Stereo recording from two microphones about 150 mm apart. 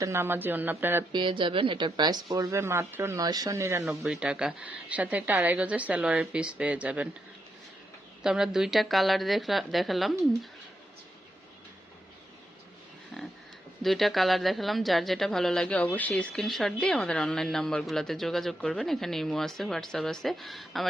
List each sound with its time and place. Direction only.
0.0 s a woman's voice: 15° right (ahead or behind)
1.1 s a woman's voice: 35° right (ahead or behind); by 3.8 s 20° right (ahead or behind)
3.8 s a woman's voice: 5° right (ahead or behind)
8.2 s speech: 5° right (ahead or behind)
13.8 s speech: centre (ahead or behind)